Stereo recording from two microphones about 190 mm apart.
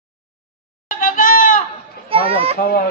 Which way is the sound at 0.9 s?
45° left (ahead or behind).